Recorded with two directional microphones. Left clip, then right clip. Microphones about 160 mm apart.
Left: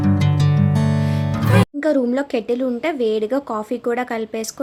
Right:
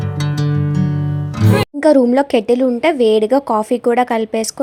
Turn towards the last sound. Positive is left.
turn(degrees=-35)  # may be behind; listen again after turning